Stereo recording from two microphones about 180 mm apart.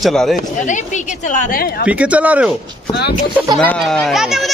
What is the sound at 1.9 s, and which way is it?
Speech, 10° right (ahead or behind).